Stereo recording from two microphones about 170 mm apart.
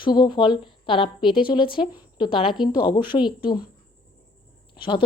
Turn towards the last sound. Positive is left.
turn(degrees=30)  # may be behind; listen again after turning